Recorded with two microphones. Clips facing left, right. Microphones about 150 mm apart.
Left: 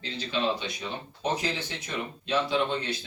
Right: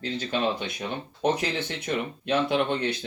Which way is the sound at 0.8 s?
60° right (ahead or behind).